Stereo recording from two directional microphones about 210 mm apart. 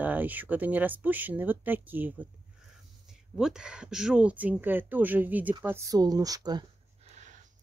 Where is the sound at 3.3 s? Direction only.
Centre (ahead or behind); by 6.7 s 20° right (ahead or behind).